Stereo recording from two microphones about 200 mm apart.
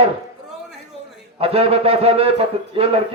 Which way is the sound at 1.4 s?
30° right (ahead or behind).